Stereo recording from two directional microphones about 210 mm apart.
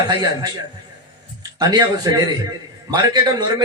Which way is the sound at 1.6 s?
20° right (ahead or behind).